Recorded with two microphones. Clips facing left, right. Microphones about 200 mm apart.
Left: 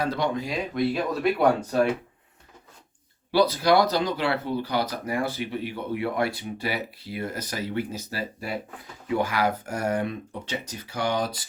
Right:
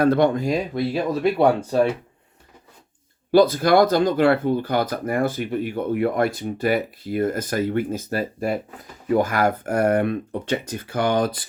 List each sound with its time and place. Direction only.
0.0 s speech: 55° right (ahead or behind)
1.4 s speech: 30° right (ahead or behind)
3.3 s speech: 50° right (ahead or behind)